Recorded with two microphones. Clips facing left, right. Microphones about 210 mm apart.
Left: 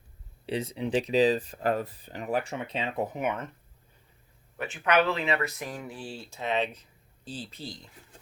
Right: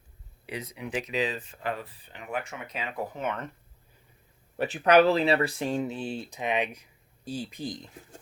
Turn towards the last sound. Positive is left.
turn(degrees=-15)  # may be behind; listen again after turning